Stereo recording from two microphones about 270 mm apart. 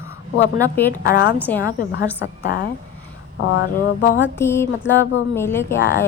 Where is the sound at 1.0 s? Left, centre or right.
Left.